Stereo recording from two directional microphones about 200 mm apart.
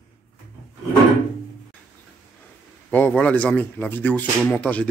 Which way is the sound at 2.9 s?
10° left (ahead or behind).